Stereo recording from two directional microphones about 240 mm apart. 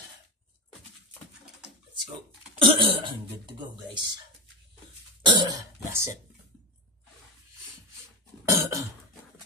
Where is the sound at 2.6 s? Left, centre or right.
Right.